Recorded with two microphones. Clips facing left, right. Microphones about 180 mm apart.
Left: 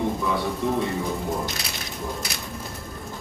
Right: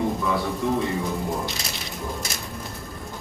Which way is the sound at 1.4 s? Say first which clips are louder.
Even; centre (ahead or behind).